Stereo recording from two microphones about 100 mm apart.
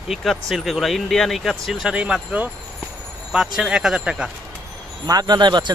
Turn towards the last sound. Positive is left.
turn(degrees=-45)  # may be behind; listen again after turning